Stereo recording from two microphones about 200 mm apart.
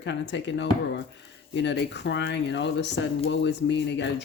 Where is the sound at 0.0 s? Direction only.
60° left (ahead or behind).